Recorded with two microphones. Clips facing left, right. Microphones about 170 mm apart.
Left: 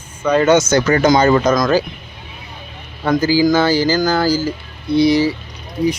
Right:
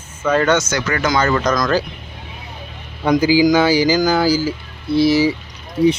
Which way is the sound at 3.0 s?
15° right (ahead or behind).